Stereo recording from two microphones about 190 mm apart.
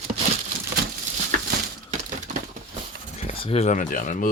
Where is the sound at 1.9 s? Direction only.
40° right (ahead or behind).